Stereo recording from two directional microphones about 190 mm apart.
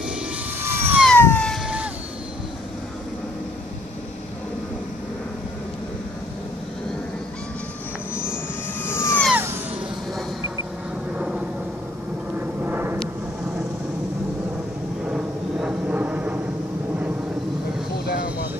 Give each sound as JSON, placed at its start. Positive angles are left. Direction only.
{"t": 0.0, "sound": "vehicle", "side_deg": -10}
{"t": 1.0, "sound": "cat", "side_deg": 10}
{"t": 8.8, "sound": "vehicle", "side_deg": 15}
{"t": 11.1, "sound": "a sound", "side_deg": -5}
{"t": 12.4, "sound": "vehicle", "side_deg": -10}
{"t": 15.0, "sound": "a sound", "side_deg": -5}
{"t": 18.0, "sound": "vehicle", "side_deg": 55}